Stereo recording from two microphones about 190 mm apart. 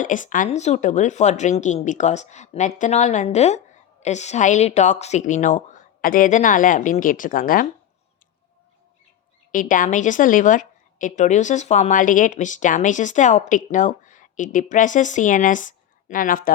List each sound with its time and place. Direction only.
0.0 s speech: 45° left (ahead or behind)
9.5 s a woman's voice: 45° left (ahead or behind)